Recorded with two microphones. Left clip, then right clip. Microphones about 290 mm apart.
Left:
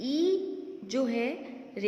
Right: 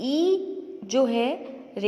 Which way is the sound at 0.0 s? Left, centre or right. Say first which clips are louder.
Right 5 dB; centre.